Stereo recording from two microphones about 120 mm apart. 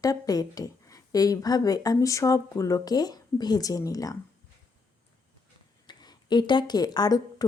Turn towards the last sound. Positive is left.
turn(degrees=35)  # may be behind; listen again after turning